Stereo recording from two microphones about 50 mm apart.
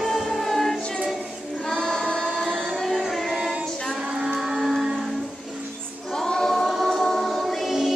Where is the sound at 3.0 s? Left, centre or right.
Centre.